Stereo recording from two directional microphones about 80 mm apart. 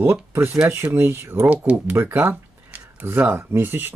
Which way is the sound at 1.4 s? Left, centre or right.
Centre.